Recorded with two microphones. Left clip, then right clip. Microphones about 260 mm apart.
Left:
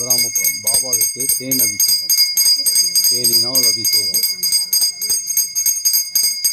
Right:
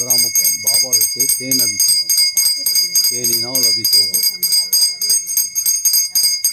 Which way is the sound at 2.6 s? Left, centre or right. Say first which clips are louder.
Even; centre.